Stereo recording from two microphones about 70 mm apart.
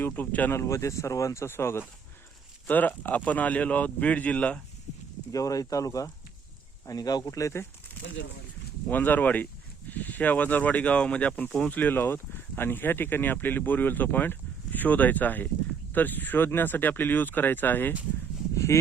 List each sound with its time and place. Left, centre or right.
0.0 s speech: left
0.5 s speech: left
2.6 s speech: left
5.3 s speech: left
6.8 s speech: left
7.3 s speech: left
8.9 s speech: left
18.5 s a sound: left